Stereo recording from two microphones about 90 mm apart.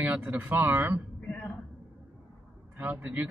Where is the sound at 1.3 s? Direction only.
20° left (ahead or behind).